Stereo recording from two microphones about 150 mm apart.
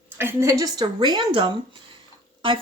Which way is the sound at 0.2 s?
15° right (ahead or behind).